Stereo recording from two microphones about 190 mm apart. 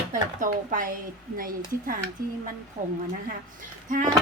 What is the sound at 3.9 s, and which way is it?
Speech, 40° right (ahead or behind).